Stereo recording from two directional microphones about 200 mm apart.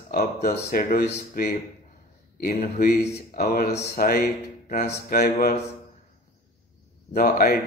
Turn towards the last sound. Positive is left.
turn(degrees=50)  # may be behind; listen again after turning